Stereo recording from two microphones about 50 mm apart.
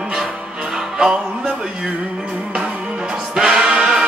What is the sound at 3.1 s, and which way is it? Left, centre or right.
Music, centre.